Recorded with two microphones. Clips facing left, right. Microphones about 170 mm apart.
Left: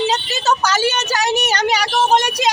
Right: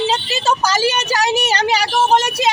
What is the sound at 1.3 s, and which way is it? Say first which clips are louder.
Speech: right 1 dB; 30° right (ahead or behind).